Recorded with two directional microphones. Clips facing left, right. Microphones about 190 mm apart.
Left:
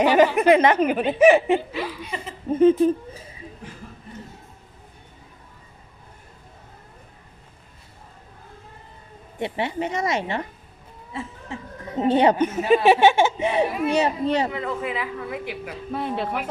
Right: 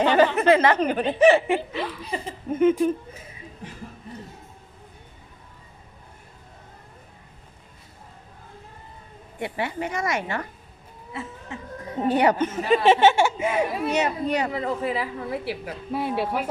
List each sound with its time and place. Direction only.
0.0 s a woman's voice: 10° left (ahead or behind)
1.4 s speech: 25° left (ahead or behind)
1.7 s speech: 5° left (ahead or behind)
2.0 s a woman's voice: 35° right (ahead or behind)
2.5 s speech: 30° left (ahead or behind)
9.4 s speech: 25° left (ahead or behind)
11.9 s speech: 20° left (ahead or behind)
14.5 s a woman's voice: 35° right (ahead or behind)
15.9 s speech: 5° right (ahead or behind)